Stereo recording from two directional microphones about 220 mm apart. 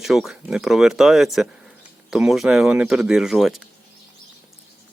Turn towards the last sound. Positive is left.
turn(degrees=0)  # may be behind; listen again after turning